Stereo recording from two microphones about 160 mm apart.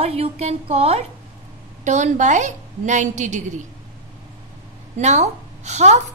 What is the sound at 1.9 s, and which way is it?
A woman's voice, 50° right (ahead or behind).